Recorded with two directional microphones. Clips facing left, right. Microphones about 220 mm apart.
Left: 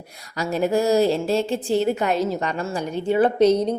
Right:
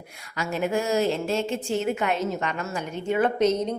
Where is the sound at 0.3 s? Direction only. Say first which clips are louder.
Left 5 dB; 35° left (ahead or behind).